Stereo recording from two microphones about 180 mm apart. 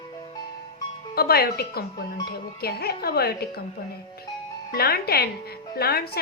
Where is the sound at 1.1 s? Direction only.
60° left (ahead or behind).